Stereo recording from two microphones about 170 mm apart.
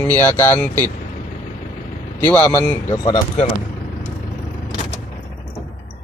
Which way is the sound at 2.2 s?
10° left (ahead or behind).